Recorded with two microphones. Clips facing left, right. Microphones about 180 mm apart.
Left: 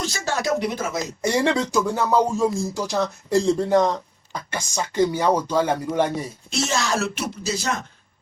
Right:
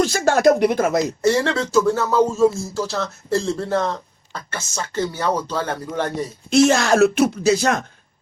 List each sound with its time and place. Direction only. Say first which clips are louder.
0.0 s speech: right 10 dB; 50° right (ahead or behind)
1.2 s speech: left 2 dB; 15° left (ahead or behind)
6.5 s speech: right 10 dB; 55° right (ahead or behind)